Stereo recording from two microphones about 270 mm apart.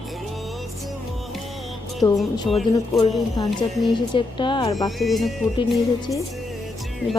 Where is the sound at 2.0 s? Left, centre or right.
Centre.